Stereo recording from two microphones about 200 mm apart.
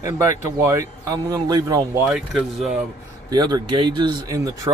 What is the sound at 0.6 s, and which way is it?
Speech, 15° right (ahead or behind).